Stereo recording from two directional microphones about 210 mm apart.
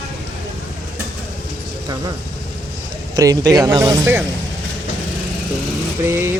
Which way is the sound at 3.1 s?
15° right (ahead or behind).